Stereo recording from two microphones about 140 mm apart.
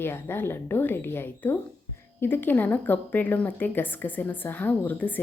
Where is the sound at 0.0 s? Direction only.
15° left (ahead or behind).